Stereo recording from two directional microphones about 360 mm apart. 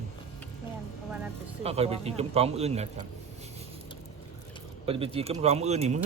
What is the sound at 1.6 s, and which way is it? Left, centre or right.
Speech, centre.